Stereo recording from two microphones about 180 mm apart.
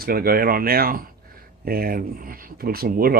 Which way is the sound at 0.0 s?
55° right (ahead or behind).